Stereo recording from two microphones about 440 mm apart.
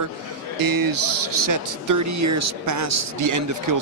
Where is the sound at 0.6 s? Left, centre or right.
Right.